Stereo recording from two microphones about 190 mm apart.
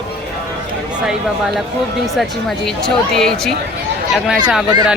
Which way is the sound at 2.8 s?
Centre (ahead or behind).